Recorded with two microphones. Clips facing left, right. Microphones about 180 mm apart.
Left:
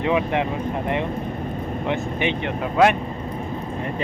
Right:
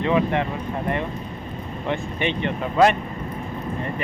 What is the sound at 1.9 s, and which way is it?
Speech, 10° left (ahead or behind).